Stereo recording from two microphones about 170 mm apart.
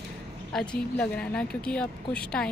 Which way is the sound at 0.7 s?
5° left (ahead or behind).